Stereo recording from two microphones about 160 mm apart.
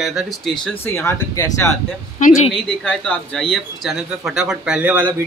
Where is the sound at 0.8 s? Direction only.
15° left (ahead or behind).